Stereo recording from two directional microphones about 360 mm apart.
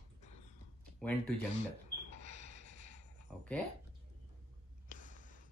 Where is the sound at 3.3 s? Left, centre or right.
Centre.